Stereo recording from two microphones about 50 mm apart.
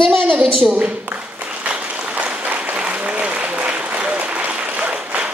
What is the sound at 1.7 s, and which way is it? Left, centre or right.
Applause, right.